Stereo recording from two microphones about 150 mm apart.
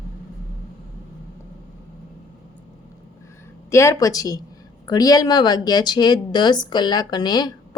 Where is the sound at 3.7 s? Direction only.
20° left (ahead or behind).